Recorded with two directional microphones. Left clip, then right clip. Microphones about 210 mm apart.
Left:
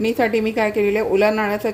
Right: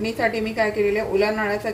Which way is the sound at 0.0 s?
50° left (ahead or behind).